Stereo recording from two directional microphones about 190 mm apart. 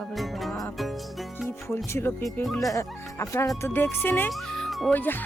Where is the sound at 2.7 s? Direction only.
15° left (ahead or behind).